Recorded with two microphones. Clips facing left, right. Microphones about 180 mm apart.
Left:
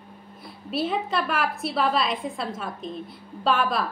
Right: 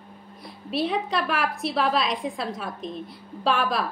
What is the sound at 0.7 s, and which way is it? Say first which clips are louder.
A woman's voice: even; centre (ahead or behind).